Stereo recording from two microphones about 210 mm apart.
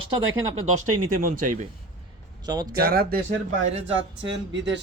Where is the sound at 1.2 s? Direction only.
40° right (ahead or behind).